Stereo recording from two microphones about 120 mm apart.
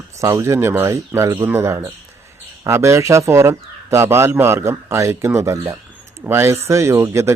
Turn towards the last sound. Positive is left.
turn(degrees=-25)  # may be behind; listen again after turning